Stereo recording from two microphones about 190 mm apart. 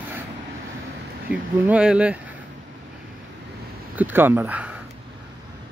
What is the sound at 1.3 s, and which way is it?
Speech, 5° right (ahead or behind).